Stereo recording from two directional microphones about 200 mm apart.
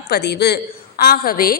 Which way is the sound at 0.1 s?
55° left (ahead or behind).